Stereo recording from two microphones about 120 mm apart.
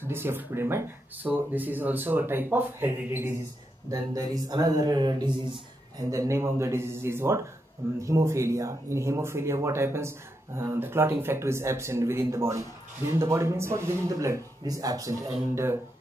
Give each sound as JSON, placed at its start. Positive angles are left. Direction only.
{"t": 0.0, "sound": "speech", "side_deg": -20}
{"t": 3.9, "sound": "speech", "side_deg": -30}
{"t": 6.0, "sound": "speech", "side_deg": -25}